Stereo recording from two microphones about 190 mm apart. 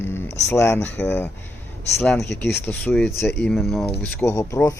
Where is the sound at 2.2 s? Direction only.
60° left (ahead or behind).